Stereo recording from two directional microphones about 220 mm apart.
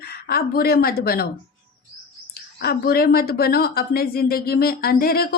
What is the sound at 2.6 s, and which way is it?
Speech, 45° left (ahead or behind).